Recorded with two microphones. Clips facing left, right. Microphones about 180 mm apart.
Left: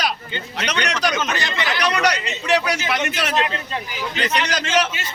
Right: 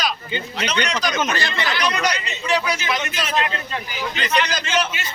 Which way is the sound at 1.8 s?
70° left (ahead or behind).